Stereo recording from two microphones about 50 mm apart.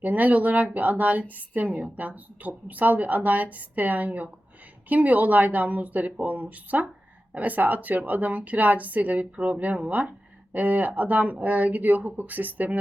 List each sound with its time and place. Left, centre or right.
0.0 s a woman's voice: right